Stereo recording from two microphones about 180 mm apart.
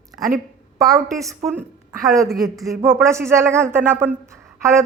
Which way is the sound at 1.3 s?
15° right (ahead or behind).